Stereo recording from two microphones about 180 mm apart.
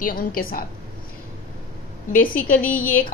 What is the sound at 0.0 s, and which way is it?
Speech, 55° left (ahead or behind).